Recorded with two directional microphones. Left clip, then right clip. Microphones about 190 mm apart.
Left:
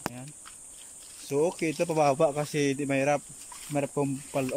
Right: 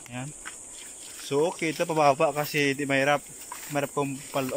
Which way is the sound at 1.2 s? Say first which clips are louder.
Right 1 dB; 10° left (ahead or behind).